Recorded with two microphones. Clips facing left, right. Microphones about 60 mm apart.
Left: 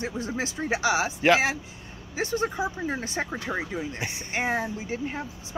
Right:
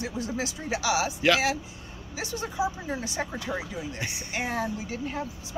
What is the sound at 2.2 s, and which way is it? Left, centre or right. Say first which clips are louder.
Speech: left 3 dB; left.